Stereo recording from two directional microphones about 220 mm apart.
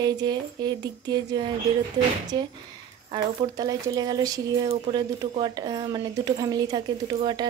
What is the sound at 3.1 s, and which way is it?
Speech, 20° right (ahead or behind).